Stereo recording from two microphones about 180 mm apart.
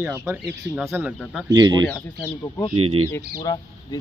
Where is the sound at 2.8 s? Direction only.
30° right (ahead or behind).